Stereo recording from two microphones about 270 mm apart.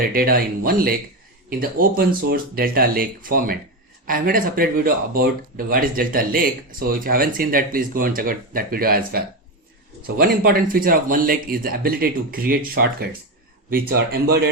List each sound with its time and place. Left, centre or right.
0.1 s speech: right